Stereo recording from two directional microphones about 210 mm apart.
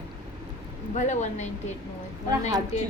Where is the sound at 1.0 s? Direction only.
35° left (ahead or behind).